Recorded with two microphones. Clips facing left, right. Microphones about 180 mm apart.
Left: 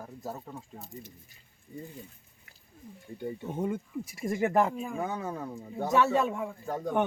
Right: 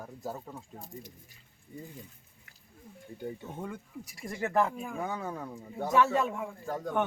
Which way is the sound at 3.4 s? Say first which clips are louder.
Left 8 dB; 20° left (ahead or behind).